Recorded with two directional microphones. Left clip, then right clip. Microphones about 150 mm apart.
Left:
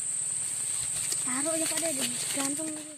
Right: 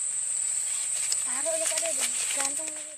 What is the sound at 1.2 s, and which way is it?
Speech, 65° right (ahead or behind).